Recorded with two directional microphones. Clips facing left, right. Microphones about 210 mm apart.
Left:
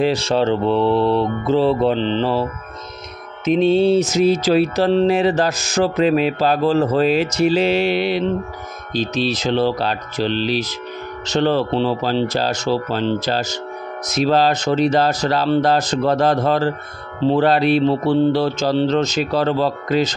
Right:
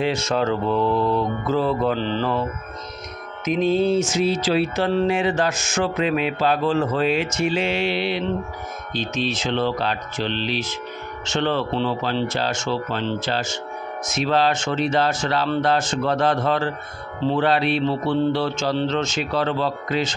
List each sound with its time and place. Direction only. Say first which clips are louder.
0.0 s mantra: left 5 dB; 35° left (ahead or behind)
3.4 s music: left 5 dB; 30° left (ahead or behind)